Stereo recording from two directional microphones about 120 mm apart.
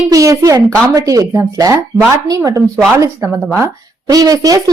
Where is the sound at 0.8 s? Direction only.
30° right (ahead or behind).